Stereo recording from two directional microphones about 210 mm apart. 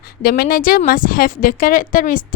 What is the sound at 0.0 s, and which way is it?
A woman's voice, 45° left (ahead or behind).